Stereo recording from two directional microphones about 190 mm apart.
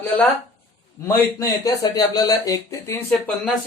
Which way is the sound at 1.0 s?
15° left (ahead or behind).